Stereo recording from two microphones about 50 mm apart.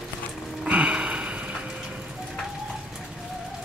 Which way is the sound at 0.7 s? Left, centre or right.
Right.